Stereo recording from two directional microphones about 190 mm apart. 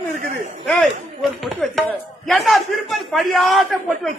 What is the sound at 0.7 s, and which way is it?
A woman's voice, centre (ahead or behind).